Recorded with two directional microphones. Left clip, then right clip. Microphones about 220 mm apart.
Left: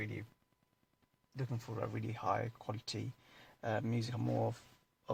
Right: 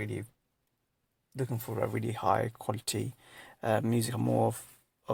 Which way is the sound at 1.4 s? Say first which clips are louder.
Right 9 dB; 40° right (ahead or behind).